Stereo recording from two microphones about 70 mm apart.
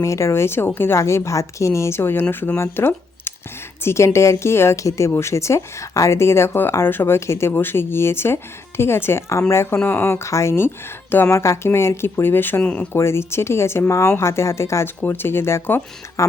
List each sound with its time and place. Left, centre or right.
0.0 s a woman's voice: left
9.7 s speech: left
12.9 s speech: left